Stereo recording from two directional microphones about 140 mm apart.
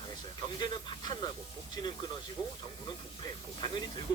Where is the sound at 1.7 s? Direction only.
30° left (ahead or behind).